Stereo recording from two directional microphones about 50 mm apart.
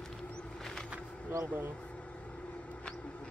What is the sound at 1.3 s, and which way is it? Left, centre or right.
Speech, right.